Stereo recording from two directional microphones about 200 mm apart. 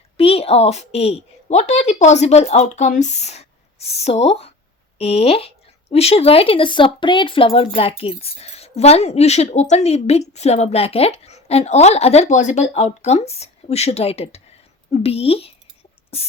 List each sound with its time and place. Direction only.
0.2 s a woman's voice: 30° left (ahead or behind)